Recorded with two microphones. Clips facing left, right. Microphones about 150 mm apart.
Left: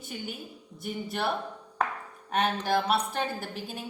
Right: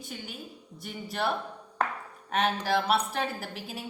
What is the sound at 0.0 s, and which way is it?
A woman's voice, centre (ahead or behind).